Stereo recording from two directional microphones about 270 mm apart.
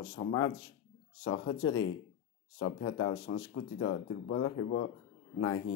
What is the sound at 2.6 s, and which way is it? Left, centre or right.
Speech, left.